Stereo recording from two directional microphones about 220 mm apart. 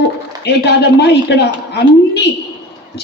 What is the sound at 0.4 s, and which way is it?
A man's voice, 50° left (ahead or behind).